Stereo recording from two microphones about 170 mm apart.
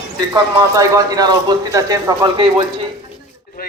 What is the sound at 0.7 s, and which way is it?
A man's voice, 20° right (ahead or behind).